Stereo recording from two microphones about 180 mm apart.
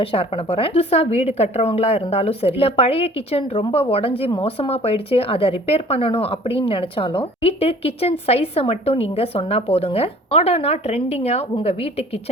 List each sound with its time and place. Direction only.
0.0 s a woman's voice: 30° left (ahead or behind)